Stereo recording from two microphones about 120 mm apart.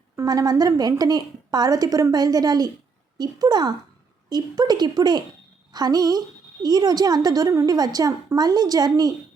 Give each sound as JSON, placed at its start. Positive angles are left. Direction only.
{"t": 0.2, "sound": "a woman's voice", "side_deg": -30}